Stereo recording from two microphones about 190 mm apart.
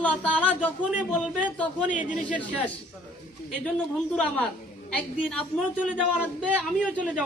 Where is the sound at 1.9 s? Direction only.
40° left (ahead or behind).